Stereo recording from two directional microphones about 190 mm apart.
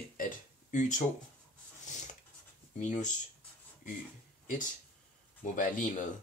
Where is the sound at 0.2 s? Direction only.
40° left (ahead or behind).